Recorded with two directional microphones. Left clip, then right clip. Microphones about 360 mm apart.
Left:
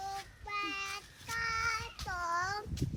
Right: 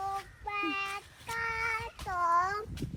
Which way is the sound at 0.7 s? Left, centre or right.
Centre.